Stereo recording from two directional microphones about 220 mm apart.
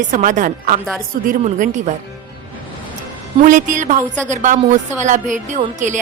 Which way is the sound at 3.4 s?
35° right (ahead or behind).